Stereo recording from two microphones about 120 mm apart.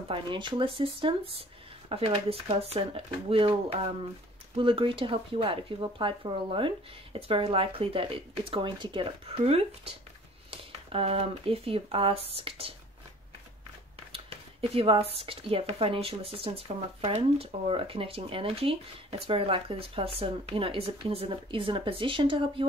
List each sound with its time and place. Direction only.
0.1 s speech: 40° right (ahead or behind)
9.4 s speech: 55° right (ahead or behind)
13.9 s speech: 50° right (ahead or behind)